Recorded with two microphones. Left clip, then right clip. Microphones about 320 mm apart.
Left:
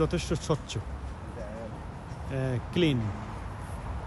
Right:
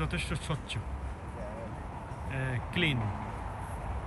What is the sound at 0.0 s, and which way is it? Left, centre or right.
Speech, centre.